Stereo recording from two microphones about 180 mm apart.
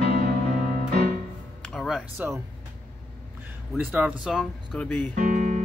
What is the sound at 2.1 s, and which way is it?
Speech, 15° right (ahead or behind).